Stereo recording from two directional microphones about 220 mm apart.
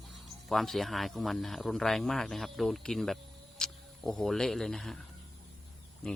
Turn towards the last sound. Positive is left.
turn(degrees=5)  # may be behind; listen again after turning